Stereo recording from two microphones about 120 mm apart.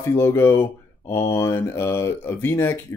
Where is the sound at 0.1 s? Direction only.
25° left (ahead or behind).